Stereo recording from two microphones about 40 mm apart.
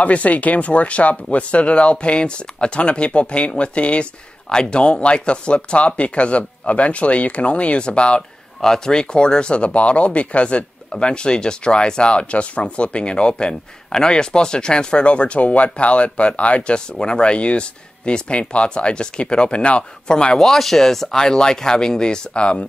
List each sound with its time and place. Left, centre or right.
0.0 s speech: left
8.5 s speech: centre
20.3 s speech: centre; by 22.7 s left